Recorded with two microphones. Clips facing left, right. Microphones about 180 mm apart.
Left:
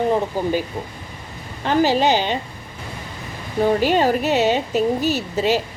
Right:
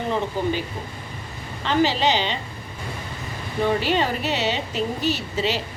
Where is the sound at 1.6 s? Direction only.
50° left (ahead or behind).